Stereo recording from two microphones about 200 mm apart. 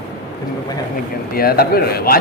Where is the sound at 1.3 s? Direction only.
50° left (ahead or behind).